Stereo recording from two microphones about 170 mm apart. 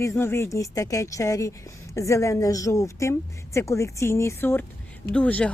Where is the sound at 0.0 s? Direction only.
15° left (ahead or behind).